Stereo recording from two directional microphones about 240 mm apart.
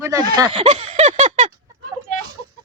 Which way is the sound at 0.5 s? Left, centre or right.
Right.